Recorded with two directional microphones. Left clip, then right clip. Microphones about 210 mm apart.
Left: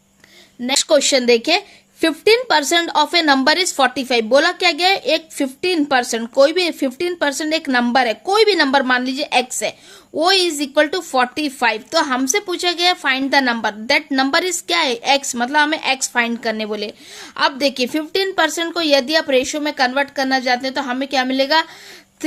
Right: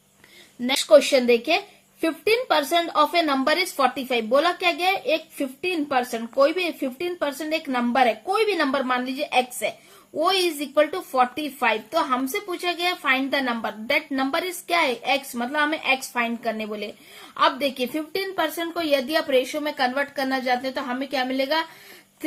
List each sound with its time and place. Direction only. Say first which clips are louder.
0.9 s a woman's voice: left 1 dB; 55° left (ahead or behind); by 21.7 s 40° left (ahead or behind)